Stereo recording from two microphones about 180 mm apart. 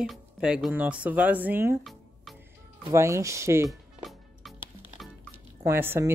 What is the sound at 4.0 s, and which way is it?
Music, centre (ahead or behind).